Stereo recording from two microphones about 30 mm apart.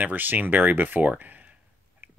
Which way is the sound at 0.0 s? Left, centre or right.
Right.